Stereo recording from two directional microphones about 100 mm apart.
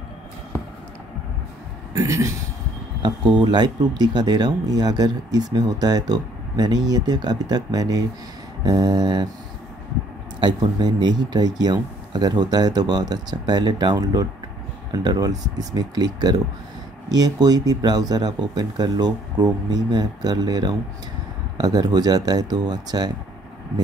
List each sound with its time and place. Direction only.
2.0 s speech: 30° right (ahead or behind)
3.0 s speech: 50° right (ahead or behind)
10.4 s speech: 45° right (ahead or behind)